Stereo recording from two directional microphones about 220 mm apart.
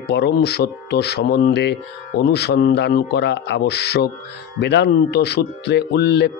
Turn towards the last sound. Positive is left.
turn(degrees=50)  # may be behind; listen again after turning